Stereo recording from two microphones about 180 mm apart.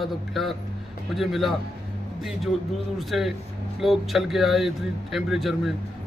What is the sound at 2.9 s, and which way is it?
A man's voice, centre (ahead or behind).